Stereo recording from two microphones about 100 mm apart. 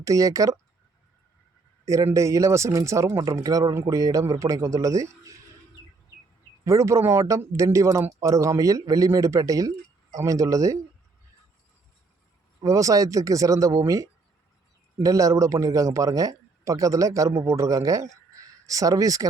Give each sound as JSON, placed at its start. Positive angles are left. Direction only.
{"t": 0.0, "sound": "speech", "side_deg": -35}
{"t": 1.8, "sound": "speech", "side_deg": -30}
{"t": 6.7, "sound": "speech", "side_deg": -30}
{"t": 12.6, "sound": "speech", "side_deg": -35}